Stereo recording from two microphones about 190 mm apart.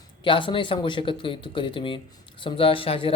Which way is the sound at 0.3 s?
25° left (ahead or behind).